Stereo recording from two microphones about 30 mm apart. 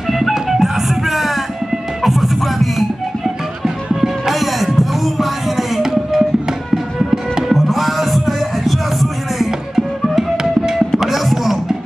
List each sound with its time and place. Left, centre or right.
0.0 s music: centre
3.6 s music: centre
4.4 s a sound: centre
5.8 s a sound: centre
6.7 s music: centre
7.5 s music: centre
10.3 s music: right
11.0 s music: centre